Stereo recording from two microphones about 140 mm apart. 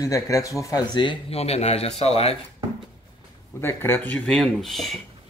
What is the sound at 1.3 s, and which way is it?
Speech, 45° left (ahead or behind).